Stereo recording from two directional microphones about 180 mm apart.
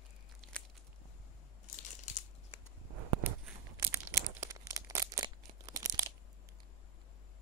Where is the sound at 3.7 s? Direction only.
15° right (ahead or behind).